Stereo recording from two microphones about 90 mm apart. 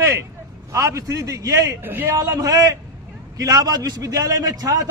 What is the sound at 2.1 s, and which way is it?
A man's voice, 45° right (ahead or behind).